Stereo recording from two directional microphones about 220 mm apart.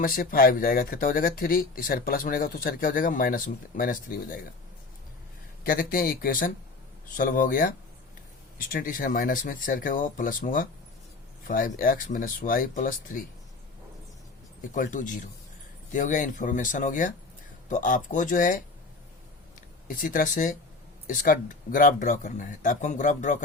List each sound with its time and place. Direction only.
0.0 s speech: 40° left (ahead or behind)
5.6 s speech: 40° left (ahead or behind)
14.7 s speech: 35° left (ahead or behind)
19.9 s speech: 40° left (ahead or behind)